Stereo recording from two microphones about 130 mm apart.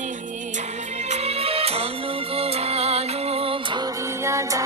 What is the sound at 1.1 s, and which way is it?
Music, 55° right (ahead or behind).